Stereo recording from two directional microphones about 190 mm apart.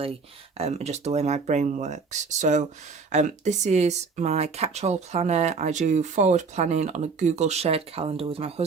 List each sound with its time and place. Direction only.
0.5 s speech: 35° right (ahead or behind)